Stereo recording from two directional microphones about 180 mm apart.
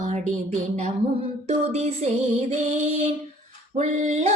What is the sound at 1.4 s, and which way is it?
Music, 35° right (ahead or behind).